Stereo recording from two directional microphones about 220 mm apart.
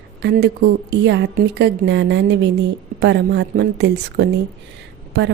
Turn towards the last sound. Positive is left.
turn(degrees=-50)  # may be behind; listen again after turning